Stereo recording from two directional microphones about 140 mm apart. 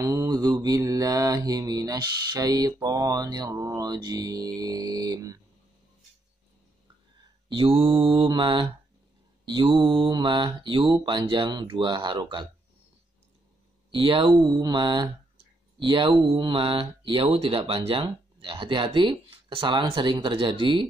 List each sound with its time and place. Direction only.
0.0 s mantra: 25° right (ahead or behind)
7.4 s speech: 40° right (ahead or behind)
13.9 s speech: 40° right (ahead or behind)